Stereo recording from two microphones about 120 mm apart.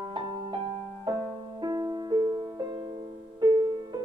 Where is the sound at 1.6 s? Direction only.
35° right (ahead or behind).